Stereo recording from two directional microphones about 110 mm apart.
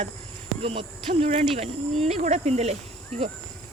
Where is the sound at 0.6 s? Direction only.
60° right (ahead or behind); by 2.8 s 85° right.